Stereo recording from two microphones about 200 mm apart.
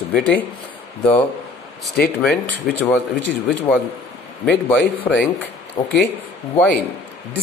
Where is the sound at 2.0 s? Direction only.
5° left (ahead or behind).